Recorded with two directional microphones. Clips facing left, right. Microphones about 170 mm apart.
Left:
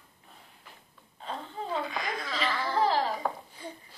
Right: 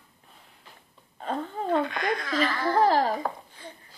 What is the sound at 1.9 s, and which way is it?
Speech, 5° left (ahead or behind).